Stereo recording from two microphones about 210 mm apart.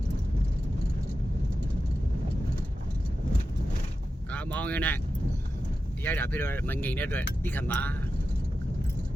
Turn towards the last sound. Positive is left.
turn(degrees=10)  # may be behind; listen again after turning